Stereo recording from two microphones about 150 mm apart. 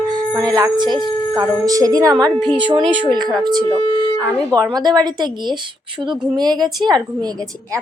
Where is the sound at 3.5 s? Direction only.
30° right (ahead or behind).